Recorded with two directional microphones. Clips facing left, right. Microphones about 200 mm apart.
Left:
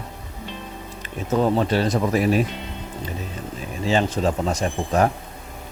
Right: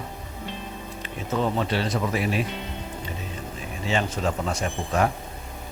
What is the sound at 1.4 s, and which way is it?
Speech, 40° left (ahead or behind).